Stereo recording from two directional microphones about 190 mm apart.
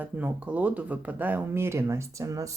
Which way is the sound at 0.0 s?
10° right (ahead or behind).